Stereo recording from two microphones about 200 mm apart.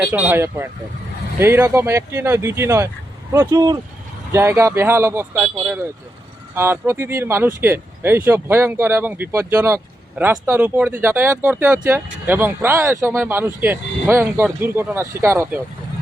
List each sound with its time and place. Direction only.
0.1 s speech: 10° right (ahead or behind)